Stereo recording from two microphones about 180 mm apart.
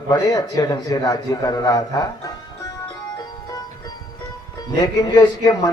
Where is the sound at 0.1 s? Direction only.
20° left (ahead or behind).